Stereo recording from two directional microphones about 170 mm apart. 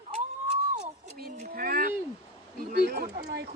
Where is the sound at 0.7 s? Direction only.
45° right (ahead or behind).